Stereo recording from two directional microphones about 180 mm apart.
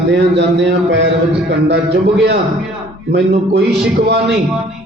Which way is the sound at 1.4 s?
70° right (ahead or behind).